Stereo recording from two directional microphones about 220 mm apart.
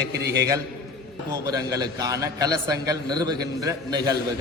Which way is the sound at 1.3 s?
15° right (ahead or behind).